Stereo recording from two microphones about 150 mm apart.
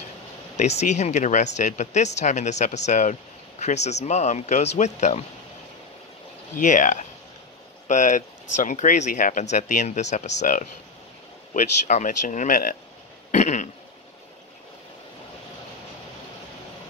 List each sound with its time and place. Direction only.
0.6 s speech: 50° left (ahead or behind)
6.6 s speech: 55° left (ahead or behind)
13.3 s speech: 50° left (ahead or behind)